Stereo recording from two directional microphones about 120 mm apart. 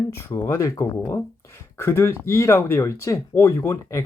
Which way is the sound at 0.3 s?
25° left (ahead or behind).